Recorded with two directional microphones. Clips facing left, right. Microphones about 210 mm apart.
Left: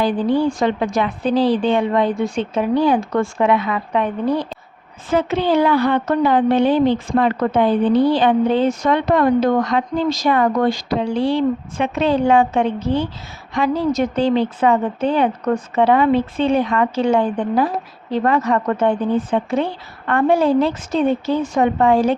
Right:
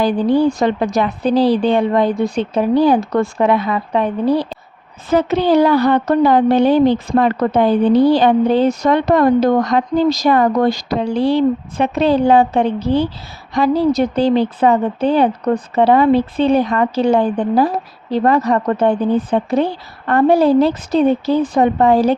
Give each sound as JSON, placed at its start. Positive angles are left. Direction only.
{"t": 0.0, "sound": "a woman's voice", "side_deg": -40}